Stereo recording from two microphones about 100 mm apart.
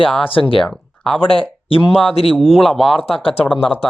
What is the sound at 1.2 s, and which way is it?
Speech, 65° left (ahead or behind).